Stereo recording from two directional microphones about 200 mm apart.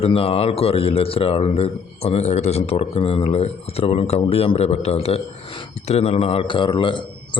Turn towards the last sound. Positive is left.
turn(degrees=25)  # may be behind; listen again after turning